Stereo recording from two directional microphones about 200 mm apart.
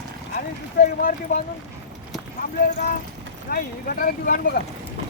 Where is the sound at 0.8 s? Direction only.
45° left (ahead or behind).